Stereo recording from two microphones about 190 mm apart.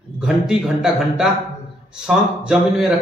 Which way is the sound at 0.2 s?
Centre (ahead or behind).